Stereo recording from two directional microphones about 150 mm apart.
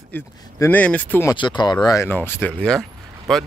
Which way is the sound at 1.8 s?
20° left (ahead or behind).